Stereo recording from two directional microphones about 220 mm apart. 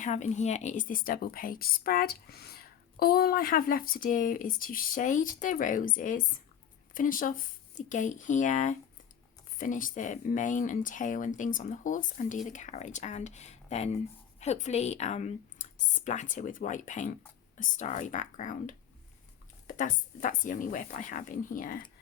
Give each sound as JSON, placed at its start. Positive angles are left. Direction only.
{"t": 0.0, "sound": "a woman's voice", "side_deg": 35}